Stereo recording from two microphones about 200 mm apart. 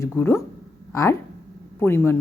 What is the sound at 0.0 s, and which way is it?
A woman's voice, 10° left (ahead or behind).